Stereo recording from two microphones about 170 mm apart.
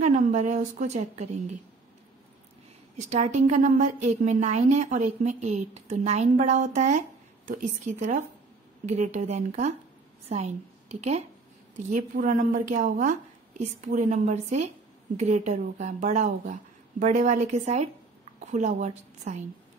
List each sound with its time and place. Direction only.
0.0 s a woman's voice: 45° right (ahead or behind)
3.1 s a woman's voice: 45° right (ahead or behind)
11.9 s a woman's voice: 50° right (ahead or behind)